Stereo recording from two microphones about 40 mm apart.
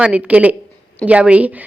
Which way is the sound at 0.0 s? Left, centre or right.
Right.